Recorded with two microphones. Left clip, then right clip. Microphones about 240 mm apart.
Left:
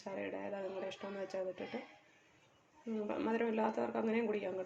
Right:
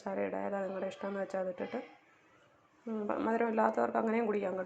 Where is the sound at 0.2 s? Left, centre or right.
Centre.